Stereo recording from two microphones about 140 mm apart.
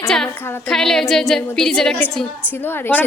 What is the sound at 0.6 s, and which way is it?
Female singing, 5° left (ahead or behind).